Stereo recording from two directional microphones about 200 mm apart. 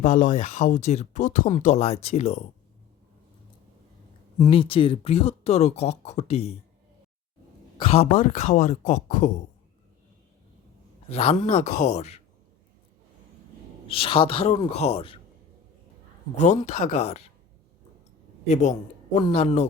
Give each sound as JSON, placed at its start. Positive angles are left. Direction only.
{"t": 0.0, "sound": "speech", "side_deg": 40}
{"t": 4.4, "sound": "speech", "side_deg": 25}
{"t": 7.8, "sound": "speech", "side_deg": 30}
{"t": 11.1, "sound": "speech", "side_deg": 30}
{"t": 13.8, "sound": "speech", "side_deg": 25}
{"t": 16.3, "sound": "speech", "side_deg": 35}
{"t": 18.4, "sound": "speech", "side_deg": 35}